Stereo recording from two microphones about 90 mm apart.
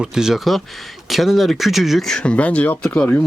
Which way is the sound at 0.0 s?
5° right (ahead or behind).